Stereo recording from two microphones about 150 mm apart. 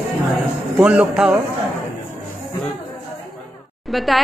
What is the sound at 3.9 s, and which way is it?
Speech, centre (ahead or behind).